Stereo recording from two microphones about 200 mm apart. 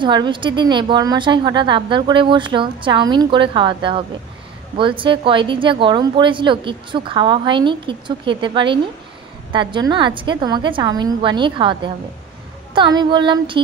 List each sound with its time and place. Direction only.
0.0 s a woman's voice: 25° right (ahead or behind)